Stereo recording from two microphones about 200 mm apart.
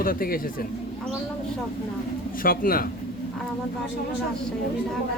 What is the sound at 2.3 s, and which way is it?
Speech, 45° left (ahead or behind).